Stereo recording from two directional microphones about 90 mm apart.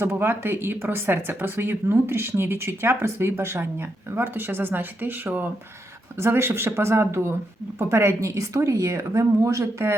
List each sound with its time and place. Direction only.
0.0 s a woman's voice: 25° right (ahead or behind)